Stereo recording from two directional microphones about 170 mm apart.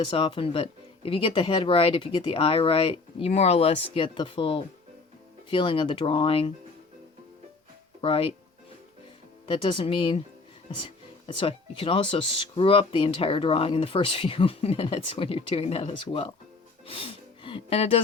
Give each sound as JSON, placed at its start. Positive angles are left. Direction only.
{"t": 0.0, "sound": "speech", "side_deg": 30}
{"t": 8.0, "sound": "speech", "side_deg": 30}
{"t": 9.5, "sound": "speech", "side_deg": 30}
{"t": 11.3, "sound": "speech", "side_deg": 30}
{"t": 16.8, "sound": "gasp", "side_deg": 35}